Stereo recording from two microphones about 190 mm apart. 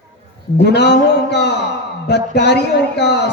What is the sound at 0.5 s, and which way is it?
A man's voice, 60° left (ahead or behind).